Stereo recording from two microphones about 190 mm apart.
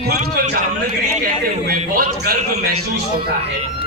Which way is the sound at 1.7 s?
55° right (ahead or behind).